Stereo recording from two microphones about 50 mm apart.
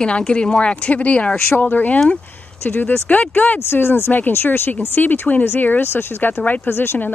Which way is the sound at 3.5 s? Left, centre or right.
Left.